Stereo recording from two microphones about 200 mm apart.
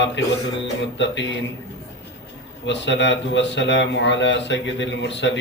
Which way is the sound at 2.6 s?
65° left (ahead or behind).